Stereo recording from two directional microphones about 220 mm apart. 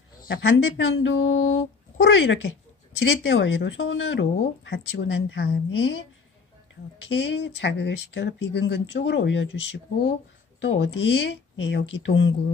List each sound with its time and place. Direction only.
0.3 s speech: 55° left (ahead or behind)
7.1 s speech: 55° left (ahead or behind)